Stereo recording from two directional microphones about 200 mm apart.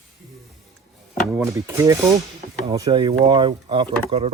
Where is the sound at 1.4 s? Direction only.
15° right (ahead or behind).